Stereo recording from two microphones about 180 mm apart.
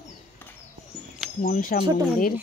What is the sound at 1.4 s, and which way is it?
Speech, 50° left (ahead or behind).